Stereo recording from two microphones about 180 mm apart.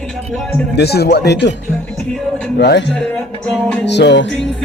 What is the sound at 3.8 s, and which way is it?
Speech, 75° left (ahead or behind).